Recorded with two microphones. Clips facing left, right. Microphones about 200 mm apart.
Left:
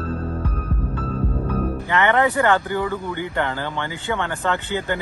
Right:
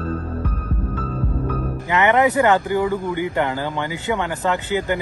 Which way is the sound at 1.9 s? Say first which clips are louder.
Right 3 dB; 15° right (ahead or behind).